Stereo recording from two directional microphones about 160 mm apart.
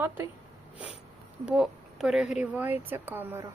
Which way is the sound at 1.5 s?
5° right (ahead or behind).